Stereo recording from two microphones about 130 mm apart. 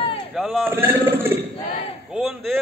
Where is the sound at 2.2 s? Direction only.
Centre (ahead or behind).